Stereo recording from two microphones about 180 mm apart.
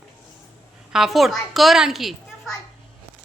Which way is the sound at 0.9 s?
Centre (ahead or behind).